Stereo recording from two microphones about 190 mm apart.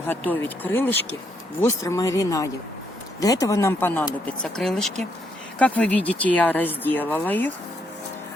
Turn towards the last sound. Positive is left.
turn(degrees=10)  # may be behind; listen again after turning